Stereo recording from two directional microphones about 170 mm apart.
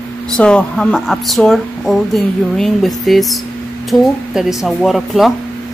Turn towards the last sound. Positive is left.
turn(degrees=0)  # may be behind; listen again after turning